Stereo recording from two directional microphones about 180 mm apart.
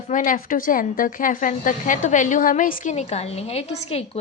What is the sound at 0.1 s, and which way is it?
A woman's voice, 45° left (ahead or behind).